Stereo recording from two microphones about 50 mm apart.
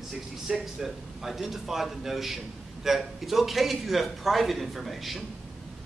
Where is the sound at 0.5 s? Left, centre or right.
Centre.